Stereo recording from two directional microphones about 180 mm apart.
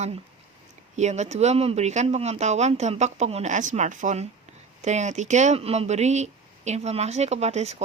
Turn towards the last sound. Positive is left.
turn(degrees=-35)  # may be behind; listen again after turning